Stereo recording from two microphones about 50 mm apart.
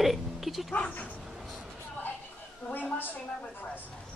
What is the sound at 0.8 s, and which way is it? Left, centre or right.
Speech, left.